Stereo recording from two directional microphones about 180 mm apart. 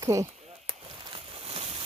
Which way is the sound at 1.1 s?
30° right (ahead or behind).